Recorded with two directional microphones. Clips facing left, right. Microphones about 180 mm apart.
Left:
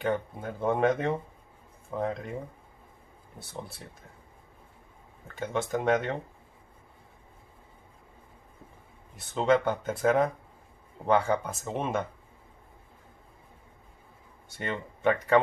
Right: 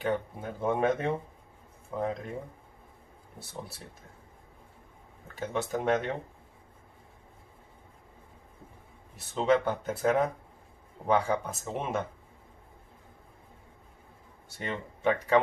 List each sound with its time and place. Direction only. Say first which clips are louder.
0.0 s speech: left 1 dB; 5° right (ahead or behind)
5.4 s speech: left 2 dB; centre (ahead or behind)
9.3 s speech: left 1 dB; centre (ahead or behind)
15.0 s speech: left 1 dB; centre (ahead or behind)